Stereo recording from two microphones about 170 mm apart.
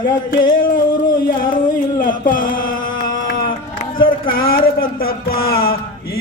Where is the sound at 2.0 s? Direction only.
55° left (ahead or behind).